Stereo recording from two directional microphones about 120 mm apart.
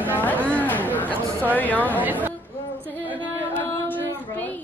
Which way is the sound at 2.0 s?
15° right (ahead or behind).